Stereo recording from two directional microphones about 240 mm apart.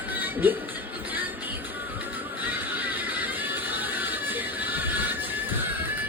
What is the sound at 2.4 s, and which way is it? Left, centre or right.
Music, centre.